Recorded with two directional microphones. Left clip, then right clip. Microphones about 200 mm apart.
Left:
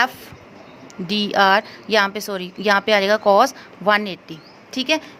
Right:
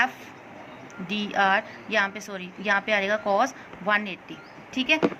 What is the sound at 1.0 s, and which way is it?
A woman's voice, 60° left (ahead or behind).